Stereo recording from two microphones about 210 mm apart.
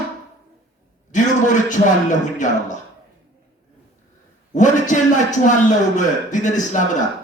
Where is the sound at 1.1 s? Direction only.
35° left (ahead or behind).